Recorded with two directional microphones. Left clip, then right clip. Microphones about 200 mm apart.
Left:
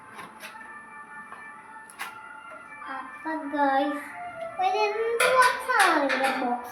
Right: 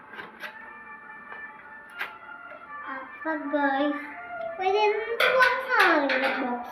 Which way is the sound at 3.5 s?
15° left (ahead or behind).